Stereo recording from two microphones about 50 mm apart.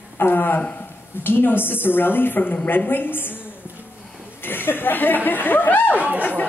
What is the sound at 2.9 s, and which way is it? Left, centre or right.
Speech, left.